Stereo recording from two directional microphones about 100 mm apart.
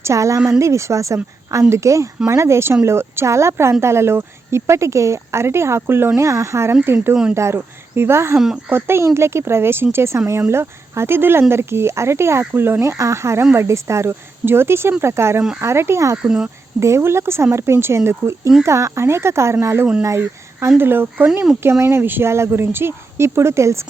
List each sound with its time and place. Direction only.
0.0 s speech: 30° right (ahead or behind)
16.1 s speech: 10° right (ahead or behind)
16.8 s speech: 25° right (ahead or behind)